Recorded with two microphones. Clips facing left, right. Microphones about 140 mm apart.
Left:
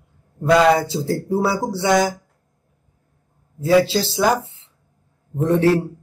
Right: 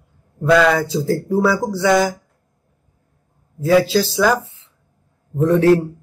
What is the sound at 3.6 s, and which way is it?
Speech, 25° left (ahead or behind).